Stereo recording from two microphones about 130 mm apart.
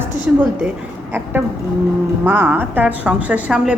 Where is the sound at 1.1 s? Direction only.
15° right (ahead or behind).